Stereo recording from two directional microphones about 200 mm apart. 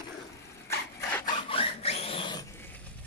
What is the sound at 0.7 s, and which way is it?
Rub, 10° left (ahead or behind).